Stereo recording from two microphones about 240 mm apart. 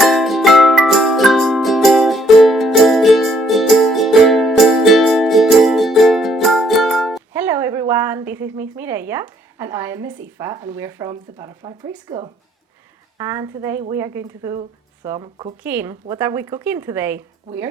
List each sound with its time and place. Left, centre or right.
0.0 s music: centre
13.1 s a woman's voice: centre